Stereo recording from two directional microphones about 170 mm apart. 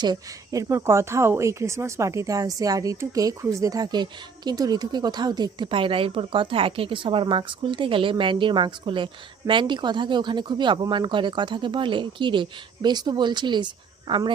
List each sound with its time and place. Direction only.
0.0 s speech: 20° right (ahead or behind)